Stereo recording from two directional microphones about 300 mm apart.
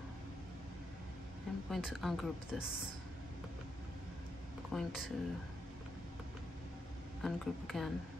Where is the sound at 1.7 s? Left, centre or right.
Centre.